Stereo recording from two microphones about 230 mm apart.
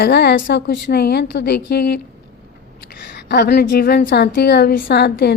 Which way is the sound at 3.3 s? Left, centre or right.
Left.